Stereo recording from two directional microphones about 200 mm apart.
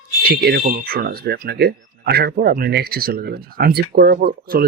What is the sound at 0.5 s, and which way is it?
Speech, 45° right (ahead or behind).